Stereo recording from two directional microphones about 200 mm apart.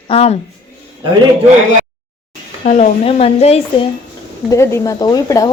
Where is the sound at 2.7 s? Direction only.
35° left (ahead or behind).